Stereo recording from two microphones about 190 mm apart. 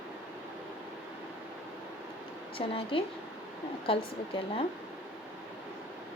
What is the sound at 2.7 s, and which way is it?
Speech, 30° left (ahead or behind).